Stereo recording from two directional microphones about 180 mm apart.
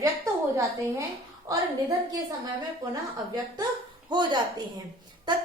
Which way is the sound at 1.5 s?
15° right (ahead or behind).